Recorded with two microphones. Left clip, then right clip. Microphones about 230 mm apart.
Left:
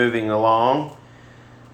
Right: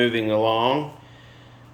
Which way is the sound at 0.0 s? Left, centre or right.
Centre.